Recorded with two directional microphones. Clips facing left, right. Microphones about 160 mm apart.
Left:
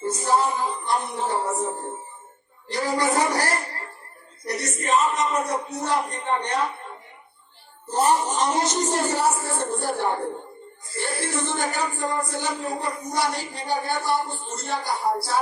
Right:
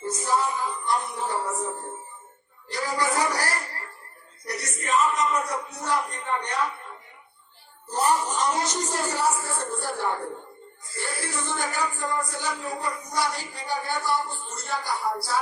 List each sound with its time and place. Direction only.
0.0 s music: 30° left (ahead or behind)
2.6 s a woman's voice: 25° left (ahead or behind)
4.4 s a sound: 25° left (ahead or behind)
4.9 s speech: 25° left (ahead or behind)